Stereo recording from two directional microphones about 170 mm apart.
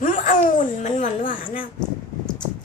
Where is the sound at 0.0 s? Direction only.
50° left (ahead or behind).